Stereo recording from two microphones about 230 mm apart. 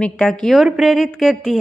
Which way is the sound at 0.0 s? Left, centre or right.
Centre.